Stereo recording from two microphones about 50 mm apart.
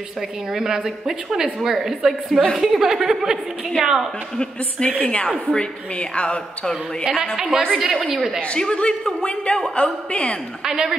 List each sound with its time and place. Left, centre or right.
0.5 s a woman's voice: centre
4.4 s a woman's voice: centre
6.6 s speech: centre
7.3 s a woman's voice: centre
8.5 s a woman's voice: centre
10.6 s a woman's voice: centre